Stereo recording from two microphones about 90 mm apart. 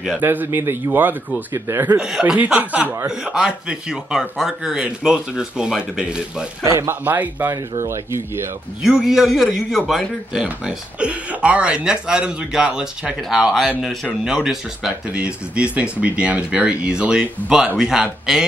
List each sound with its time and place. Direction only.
0.2 s speech: 20° right (ahead or behind)
2.0 s a man's voice: 10° right (ahead or behind)
3.1 s a man's voice: 10° right (ahead or behind)
6.6 s speech: 35° right (ahead or behind)
6.9 s speech: 20° right (ahead or behind)
7.5 s speech: 35° right (ahead or behind)
8.8 s a man's voice: 5° right (ahead or behind)